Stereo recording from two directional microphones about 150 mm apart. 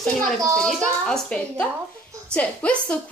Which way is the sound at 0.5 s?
5° left (ahead or behind).